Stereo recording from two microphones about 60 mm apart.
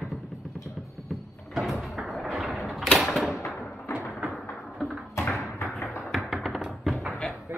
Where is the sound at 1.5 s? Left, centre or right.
Centre.